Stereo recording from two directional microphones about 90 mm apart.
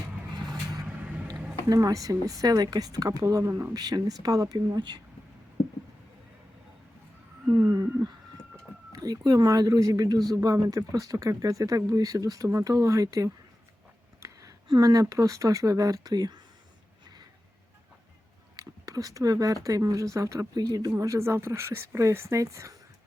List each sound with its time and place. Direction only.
0.4 s vehicle: 45° right (ahead or behind)
0.9 s vehicle: 15° right (ahead or behind)
1.6 s speech: 40° right (ahead or behind)
7.4 s a sound: 40° right (ahead or behind)
8.9 s speech: 45° right (ahead or behind)
14.7 s speech: 45° right (ahead or behind)
18.5 s speech: 40° right (ahead or behind)
21.0 s speech: 35° right (ahead or behind)